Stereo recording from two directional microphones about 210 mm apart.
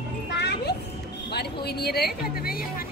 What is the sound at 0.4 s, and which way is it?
Music, 50° left (ahead or behind).